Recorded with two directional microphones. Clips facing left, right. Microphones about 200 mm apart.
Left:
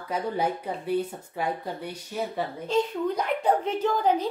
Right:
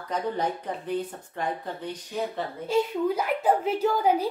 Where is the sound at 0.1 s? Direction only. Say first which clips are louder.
Left 1 dB; 10° left (ahead or behind).